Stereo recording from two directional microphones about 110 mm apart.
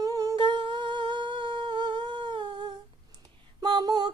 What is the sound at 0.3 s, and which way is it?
Humming, 45° right (ahead or behind).